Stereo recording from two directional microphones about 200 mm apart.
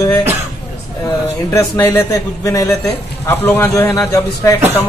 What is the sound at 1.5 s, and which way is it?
A man's voice, 15° left (ahead or behind).